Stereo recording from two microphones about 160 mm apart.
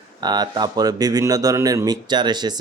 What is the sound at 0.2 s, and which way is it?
A man's voice, 25° right (ahead or behind).